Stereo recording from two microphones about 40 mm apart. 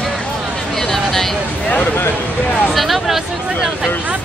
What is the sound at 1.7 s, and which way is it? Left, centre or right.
Speech, left.